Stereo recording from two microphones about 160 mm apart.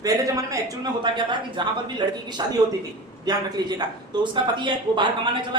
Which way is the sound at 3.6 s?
25° right (ahead or behind).